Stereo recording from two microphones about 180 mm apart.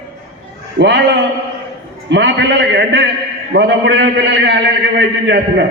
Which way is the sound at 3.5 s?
75° right (ahead or behind).